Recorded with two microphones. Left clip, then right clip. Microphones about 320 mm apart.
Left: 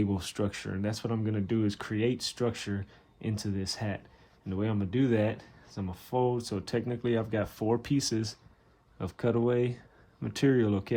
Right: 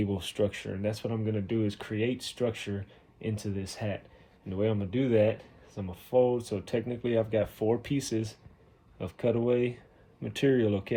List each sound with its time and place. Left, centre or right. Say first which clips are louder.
0.2 s speech: right 4 dB; centre